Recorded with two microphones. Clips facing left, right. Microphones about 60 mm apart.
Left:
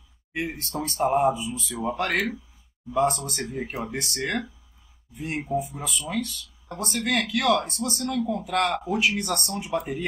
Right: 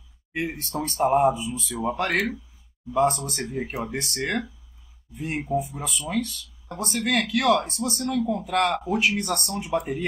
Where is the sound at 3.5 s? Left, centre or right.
Centre.